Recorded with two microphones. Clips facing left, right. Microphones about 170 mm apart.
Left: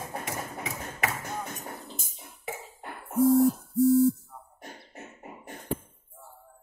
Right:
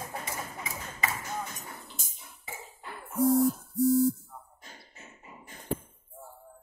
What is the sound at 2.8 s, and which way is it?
Owl, 55° left (ahead or behind).